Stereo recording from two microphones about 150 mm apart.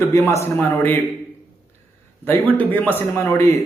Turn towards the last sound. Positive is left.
turn(degrees=15)  # may be behind; listen again after turning